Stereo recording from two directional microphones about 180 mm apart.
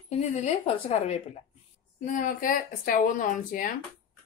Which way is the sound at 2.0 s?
45° left (ahead or behind).